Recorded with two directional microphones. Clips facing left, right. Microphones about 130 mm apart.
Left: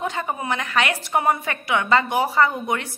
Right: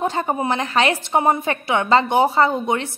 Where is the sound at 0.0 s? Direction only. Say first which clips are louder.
Right 5 dB; 35° right (ahead or behind).